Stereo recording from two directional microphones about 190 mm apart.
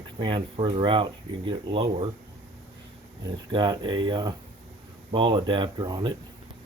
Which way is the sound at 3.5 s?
25° right (ahead or behind).